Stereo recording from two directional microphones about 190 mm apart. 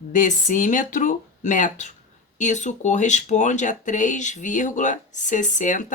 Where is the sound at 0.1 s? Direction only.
40° left (ahead or behind).